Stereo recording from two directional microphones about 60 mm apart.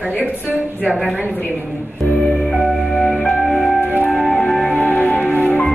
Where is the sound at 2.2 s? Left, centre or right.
Centre.